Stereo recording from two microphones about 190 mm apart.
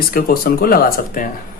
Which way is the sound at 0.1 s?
50° left (ahead or behind).